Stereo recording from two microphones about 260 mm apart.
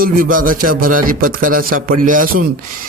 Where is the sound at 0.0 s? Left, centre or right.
Right.